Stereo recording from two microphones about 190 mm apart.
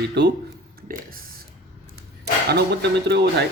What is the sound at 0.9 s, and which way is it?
Speech, 50° right (ahead or behind).